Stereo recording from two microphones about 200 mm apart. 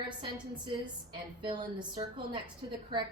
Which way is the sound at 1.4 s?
20° right (ahead or behind).